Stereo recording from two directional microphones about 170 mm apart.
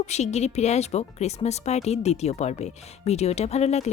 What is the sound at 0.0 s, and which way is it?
Speech, 40° left (ahead or behind).